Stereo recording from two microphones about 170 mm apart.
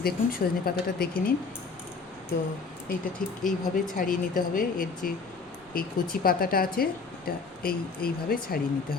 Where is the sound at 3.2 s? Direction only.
55° left (ahead or behind).